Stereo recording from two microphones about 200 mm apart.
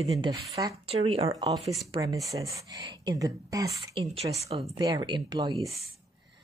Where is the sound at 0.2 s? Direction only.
20° right (ahead or behind).